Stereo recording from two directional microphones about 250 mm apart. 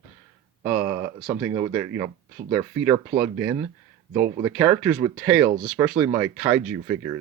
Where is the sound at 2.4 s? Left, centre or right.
Right.